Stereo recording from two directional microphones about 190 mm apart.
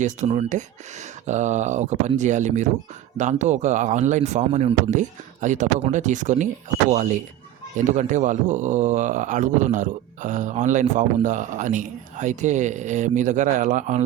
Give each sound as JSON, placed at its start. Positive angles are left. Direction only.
{"t": 0.0, "sound": "a man's voice", "side_deg": -35}